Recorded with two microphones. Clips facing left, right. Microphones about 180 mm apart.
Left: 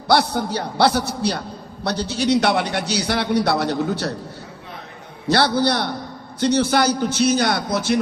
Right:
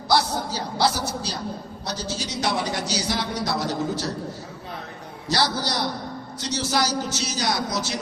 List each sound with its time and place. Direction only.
0.1 s a man's voice: 60° left (ahead or behind)
5.3 s a man's voice: 60° left (ahead or behind)